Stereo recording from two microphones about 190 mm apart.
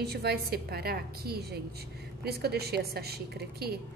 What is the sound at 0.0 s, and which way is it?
A woman's voice, 60° right (ahead or behind).